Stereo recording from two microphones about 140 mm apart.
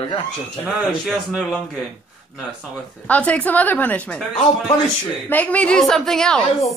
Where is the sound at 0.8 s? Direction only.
5° right (ahead or behind).